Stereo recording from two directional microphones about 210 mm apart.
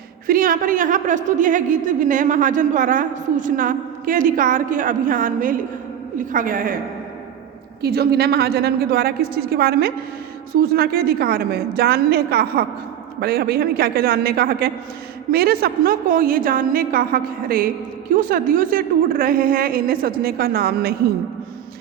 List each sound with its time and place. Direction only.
0.3 s a woman's voice: 40° right (ahead or behind)
7.8 s a woman's voice: 50° right (ahead or behind)